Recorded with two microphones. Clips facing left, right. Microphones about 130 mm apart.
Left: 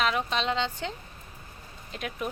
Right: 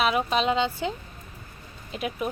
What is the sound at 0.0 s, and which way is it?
Speech, 10° right (ahead or behind).